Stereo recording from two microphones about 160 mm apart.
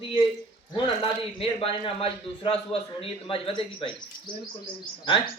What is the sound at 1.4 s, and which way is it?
A man's voice, 35° left (ahead or behind).